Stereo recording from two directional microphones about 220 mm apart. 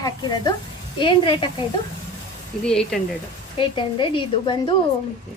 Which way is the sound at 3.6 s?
25° left (ahead or behind).